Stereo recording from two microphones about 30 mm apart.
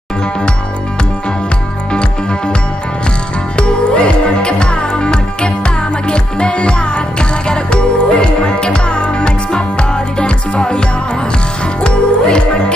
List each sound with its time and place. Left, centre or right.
1.9 s music: left
3.5 s music: left
11.8 s music: left